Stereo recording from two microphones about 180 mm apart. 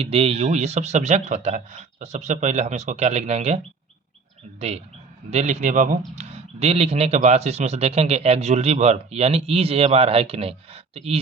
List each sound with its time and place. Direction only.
0.0 s speech: 35° right (ahead or behind)
5.3 s speech: 40° right (ahead or behind)